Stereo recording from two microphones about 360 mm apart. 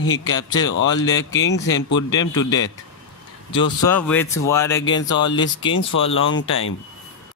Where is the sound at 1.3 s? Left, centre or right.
Left.